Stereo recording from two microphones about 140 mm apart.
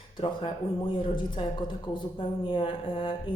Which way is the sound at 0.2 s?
35° left (ahead or behind).